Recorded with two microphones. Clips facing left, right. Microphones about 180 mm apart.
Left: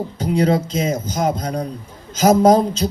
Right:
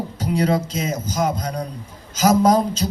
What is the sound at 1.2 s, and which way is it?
A man's voice, 30° left (ahead or behind).